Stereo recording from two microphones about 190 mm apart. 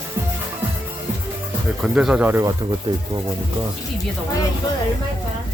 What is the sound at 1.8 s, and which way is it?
Speech, 5° right (ahead or behind).